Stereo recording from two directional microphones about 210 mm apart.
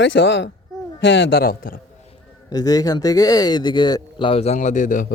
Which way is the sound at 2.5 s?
15° left (ahead or behind).